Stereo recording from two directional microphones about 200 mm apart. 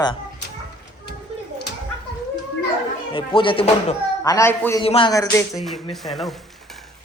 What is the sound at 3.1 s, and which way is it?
Speech, 25° left (ahead or behind).